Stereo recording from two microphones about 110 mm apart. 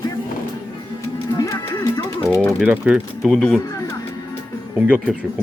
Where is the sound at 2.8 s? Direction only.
5° right (ahead or behind).